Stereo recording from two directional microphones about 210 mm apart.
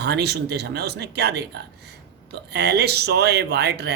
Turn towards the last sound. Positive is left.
turn(degrees=-50)  # may be behind; listen again after turning